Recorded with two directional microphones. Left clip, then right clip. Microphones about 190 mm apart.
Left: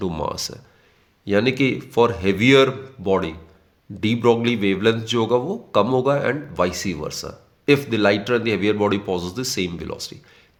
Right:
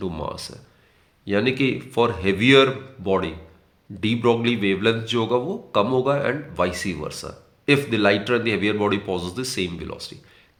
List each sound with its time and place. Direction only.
0.0 s a man's voice: 40° left (ahead or behind)